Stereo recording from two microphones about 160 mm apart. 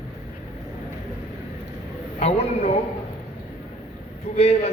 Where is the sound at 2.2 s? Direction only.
40° left (ahead or behind).